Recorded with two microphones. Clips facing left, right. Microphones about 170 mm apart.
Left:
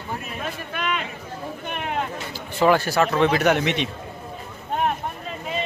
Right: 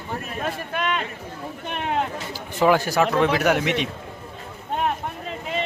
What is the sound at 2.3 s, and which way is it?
Speech, 15° right (ahead or behind).